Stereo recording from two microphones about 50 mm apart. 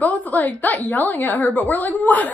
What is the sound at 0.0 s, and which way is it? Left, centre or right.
A woman's voice, left.